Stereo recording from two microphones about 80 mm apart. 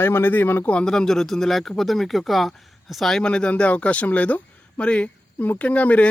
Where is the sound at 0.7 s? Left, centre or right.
Centre.